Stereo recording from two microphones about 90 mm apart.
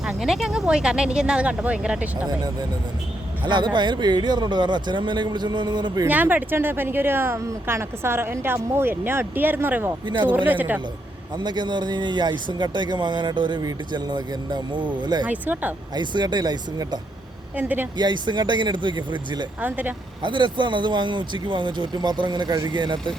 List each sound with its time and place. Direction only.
0.0 s speech: 5° right (ahead or behind)
2.2 s speech: 50° right (ahead or behind)
6.1 s speech: 20° right (ahead or behind)
10.1 s speech: 60° right (ahead or behind)
10.3 s speech: 20° right (ahead or behind)
11.3 s speech: 55° right (ahead or behind)
15.3 s speech: 20° right (ahead or behind)
16.0 s speech: 55° right (ahead or behind)
17.6 s speech: 20° right (ahead or behind)
17.9 s speech: 55° right (ahead or behind)
19.6 s speech: 20° right (ahead or behind)
20.2 s speech: 60° right (ahead or behind)